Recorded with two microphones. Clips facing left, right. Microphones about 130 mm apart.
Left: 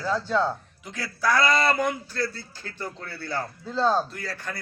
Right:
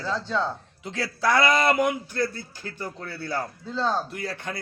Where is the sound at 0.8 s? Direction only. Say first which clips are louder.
Right 1 dB; 25° right (ahead or behind).